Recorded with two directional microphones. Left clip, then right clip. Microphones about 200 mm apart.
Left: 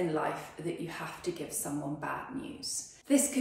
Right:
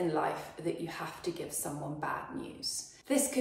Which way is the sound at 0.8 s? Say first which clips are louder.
Even; 15° right (ahead or behind).